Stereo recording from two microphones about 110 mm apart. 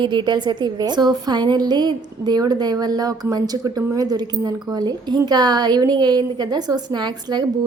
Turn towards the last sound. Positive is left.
turn(degrees=-40)  # may be behind; listen again after turning